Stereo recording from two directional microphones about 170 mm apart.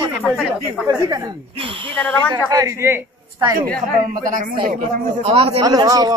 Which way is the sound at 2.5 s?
20° right (ahead or behind).